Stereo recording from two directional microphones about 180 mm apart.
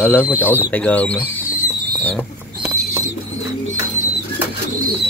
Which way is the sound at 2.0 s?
10° left (ahead or behind).